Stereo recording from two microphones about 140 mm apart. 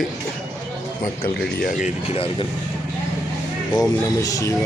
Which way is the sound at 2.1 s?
40° left (ahead or behind).